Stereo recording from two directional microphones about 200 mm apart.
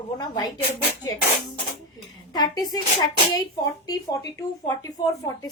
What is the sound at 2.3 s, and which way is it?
A woman's voice, 20° left (ahead or behind).